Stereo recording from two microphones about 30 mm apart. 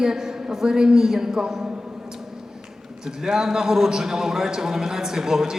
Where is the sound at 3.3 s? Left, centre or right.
Centre.